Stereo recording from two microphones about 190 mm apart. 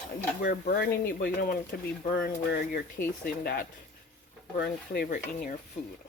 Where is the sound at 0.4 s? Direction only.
55° left (ahead or behind).